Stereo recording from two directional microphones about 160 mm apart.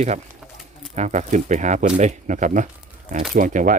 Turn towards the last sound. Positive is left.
turn(degrees=-55)  # may be behind; listen again after turning